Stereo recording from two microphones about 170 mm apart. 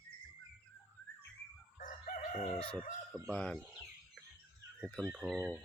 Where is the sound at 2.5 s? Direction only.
30° left (ahead or behind).